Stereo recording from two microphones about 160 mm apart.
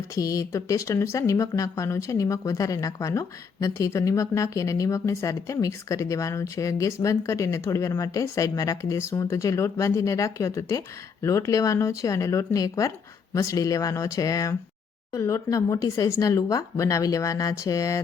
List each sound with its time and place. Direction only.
0.1 s speech: 20° left (ahead or behind)